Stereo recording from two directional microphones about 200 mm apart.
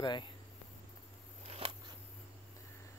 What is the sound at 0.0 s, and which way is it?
Speech, 20° left (ahead or behind).